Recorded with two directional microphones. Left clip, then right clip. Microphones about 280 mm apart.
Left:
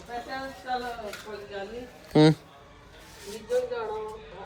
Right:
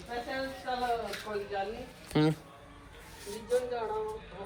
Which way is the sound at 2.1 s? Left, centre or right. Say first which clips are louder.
Left 9 dB; left.